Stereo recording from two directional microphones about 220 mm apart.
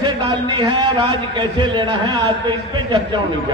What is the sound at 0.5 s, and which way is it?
A man's voice, 20° right (ahead or behind).